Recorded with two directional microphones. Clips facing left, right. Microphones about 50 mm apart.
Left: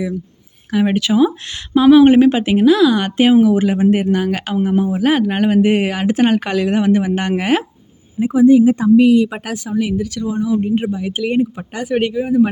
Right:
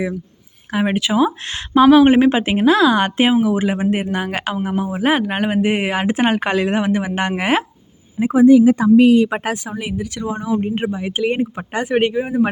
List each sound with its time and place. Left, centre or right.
0.7 s speech: centre
1.5 s speech: right
2.0 s speech: right
5.9 s speech: right
8.2 s speech: right
9.1 s speech: right
9.6 s speech: right